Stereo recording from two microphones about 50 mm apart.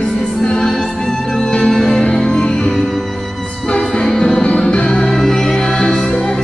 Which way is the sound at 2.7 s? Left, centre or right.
Centre.